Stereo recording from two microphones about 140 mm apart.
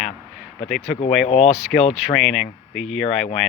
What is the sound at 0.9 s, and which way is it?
Speech, 50° left (ahead or behind).